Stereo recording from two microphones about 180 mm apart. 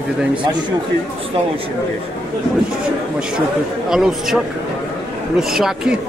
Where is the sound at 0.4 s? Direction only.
25° right (ahead or behind).